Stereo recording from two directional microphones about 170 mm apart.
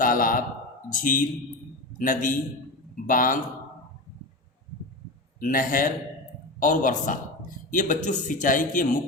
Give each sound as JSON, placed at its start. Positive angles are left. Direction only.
{"t": 0.0, "sound": "a sound", "side_deg": 55}
{"t": 0.9, "sound": "speech", "side_deg": 50}
{"t": 5.4, "sound": "speech", "side_deg": 55}